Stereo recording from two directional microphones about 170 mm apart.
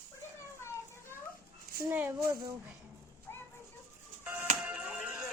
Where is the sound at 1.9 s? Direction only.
10° right (ahead or behind).